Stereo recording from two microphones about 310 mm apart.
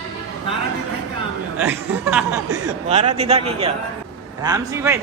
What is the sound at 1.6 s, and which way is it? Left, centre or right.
Speech, centre.